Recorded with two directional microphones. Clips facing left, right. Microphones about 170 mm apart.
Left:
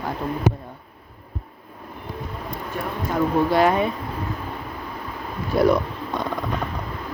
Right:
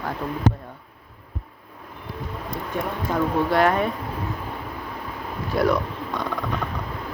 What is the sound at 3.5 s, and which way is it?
Speech, 10° left (ahead or behind).